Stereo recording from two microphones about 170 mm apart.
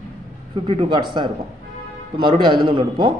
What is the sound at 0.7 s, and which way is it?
A man's voice, 30° right (ahead or behind).